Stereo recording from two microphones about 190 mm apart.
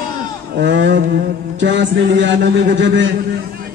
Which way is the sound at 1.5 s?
70° right (ahead or behind).